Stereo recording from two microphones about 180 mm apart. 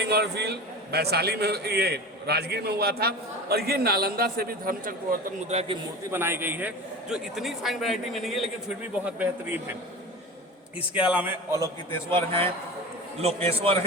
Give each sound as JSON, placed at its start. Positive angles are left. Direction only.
{"t": 0.0, "sound": "a man's voice", "side_deg": -65}
{"t": 5.5, "sound": "a man's voice", "side_deg": -35}
{"t": 6.1, "sound": "a man's voice", "side_deg": -10}
{"t": 11.1, "sound": "a man's voice", "side_deg": -10}
{"t": 12.1, "sound": "a man's voice", "side_deg": -30}